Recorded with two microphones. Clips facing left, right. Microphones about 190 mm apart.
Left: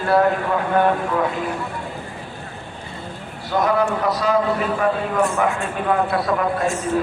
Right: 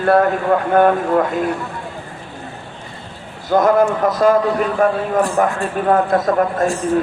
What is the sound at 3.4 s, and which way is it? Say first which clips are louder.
A man's voice: right 6 dB; 45° right (ahead or behind).